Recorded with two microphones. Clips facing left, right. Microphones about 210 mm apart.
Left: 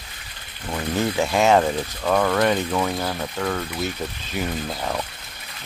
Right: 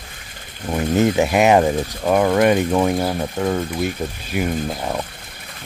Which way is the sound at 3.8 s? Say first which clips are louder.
Right 4 dB; 10° right (ahead or behind).